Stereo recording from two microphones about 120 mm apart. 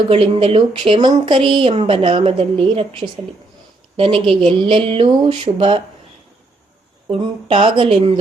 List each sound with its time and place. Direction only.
0.1 s speech: 45° right (ahead or behind)
7.1 s speech: 45° right (ahead or behind)